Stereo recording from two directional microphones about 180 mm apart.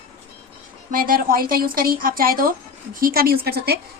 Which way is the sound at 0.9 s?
55° right (ahead or behind).